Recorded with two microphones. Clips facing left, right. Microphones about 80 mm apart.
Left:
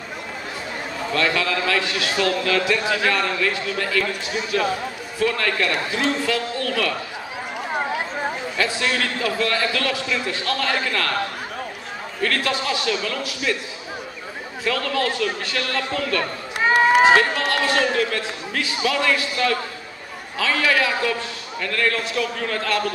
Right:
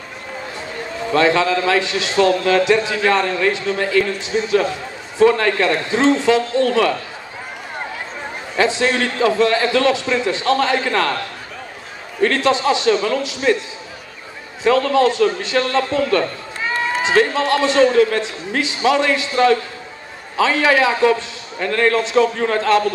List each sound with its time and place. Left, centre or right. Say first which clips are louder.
1.1 s a man's voice: right 7 dB; right
8.5 s a man's voice: right 8 dB; right
12.2 s a man's voice: right 7 dB; right
14.6 s a man's voice: right 9 dB; right
17.4 s a man's voice: right 6 dB; right